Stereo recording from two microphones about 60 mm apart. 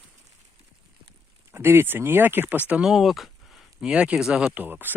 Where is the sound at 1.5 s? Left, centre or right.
Right.